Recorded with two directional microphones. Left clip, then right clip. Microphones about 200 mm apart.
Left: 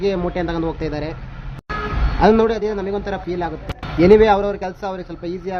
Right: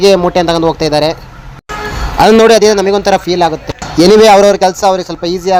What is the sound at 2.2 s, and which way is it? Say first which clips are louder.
A man's voice: right 10 dB; 45° right (ahead or behind).